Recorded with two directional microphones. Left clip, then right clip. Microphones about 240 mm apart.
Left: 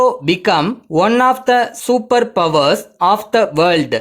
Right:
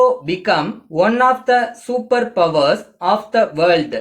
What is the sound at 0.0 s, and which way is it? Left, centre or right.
Speech, left.